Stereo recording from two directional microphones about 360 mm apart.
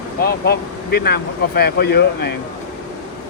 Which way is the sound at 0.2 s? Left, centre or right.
Left.